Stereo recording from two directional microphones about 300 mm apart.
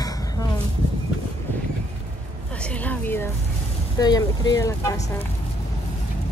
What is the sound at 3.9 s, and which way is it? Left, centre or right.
Speech, centre.